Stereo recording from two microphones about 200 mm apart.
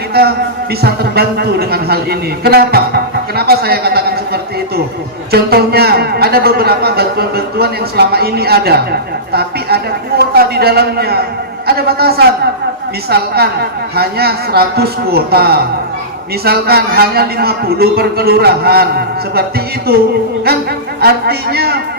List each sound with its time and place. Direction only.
0.1 s a sound: 50° right (ahead or behind)
0.8 s a man's voice: 50° right (ahead or behind)
21.0 s a man's voice: 50° right (ahead or behind)